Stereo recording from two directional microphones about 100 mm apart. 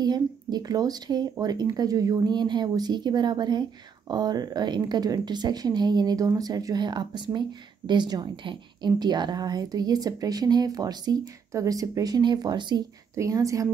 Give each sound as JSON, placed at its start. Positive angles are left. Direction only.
{"t": 0.0, "sound": "speech", "side_deg": -40}
{"t": 13.1, "sound": "a woman's voice", "side_deg": -35}